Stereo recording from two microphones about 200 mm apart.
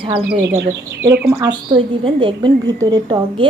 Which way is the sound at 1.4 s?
25° right (ahead or behind).